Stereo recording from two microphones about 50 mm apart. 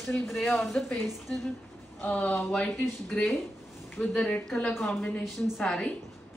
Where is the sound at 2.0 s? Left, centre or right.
Left.